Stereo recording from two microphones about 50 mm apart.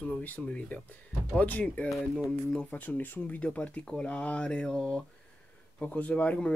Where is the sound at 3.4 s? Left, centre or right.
Left.